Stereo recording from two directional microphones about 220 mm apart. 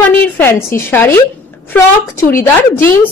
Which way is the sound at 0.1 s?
10° left (ahead or behind).